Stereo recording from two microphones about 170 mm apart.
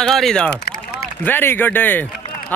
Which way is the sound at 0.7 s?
65° left (ahead or behind).